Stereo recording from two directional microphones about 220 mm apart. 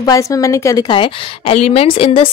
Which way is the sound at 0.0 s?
15° left (ahead or behind).